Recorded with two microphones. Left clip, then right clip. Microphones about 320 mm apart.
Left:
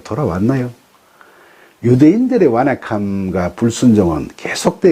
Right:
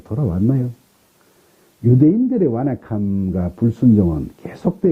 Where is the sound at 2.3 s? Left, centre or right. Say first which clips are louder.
Left 7 dB; centre.